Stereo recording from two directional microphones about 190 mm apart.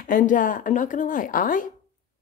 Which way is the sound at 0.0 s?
45° left (ahead or behind).